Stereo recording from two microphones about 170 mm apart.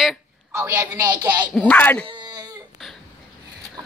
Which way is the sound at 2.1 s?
25° right (ahead or behind).